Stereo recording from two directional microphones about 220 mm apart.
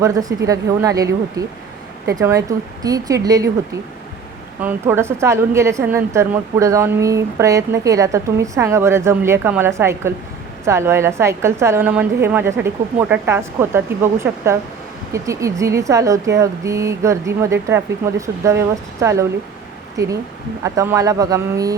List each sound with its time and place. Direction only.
0.0 s a woman's voice: 15° right (ahead or behind)
4.6 s a woman's voice: 10° right (ahead or behind)